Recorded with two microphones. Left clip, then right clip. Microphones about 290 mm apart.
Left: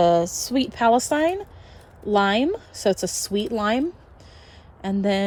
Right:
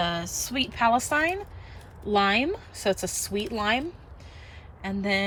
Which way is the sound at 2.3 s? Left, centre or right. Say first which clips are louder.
Left 3 dB; centre.